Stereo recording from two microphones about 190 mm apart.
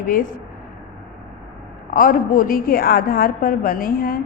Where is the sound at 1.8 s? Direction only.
45° left (ahead or behind).